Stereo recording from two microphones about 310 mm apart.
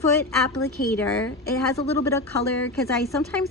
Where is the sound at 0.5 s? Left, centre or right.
Centre.